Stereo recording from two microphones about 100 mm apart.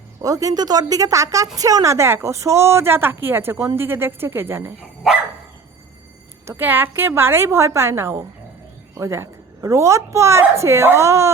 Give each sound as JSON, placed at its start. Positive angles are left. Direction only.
{"t": 0.2, "sound": "a woman's voice", "side_deg": -35}
{"t": 6.4, "sound": "a woman's voice", "side_deg": -20}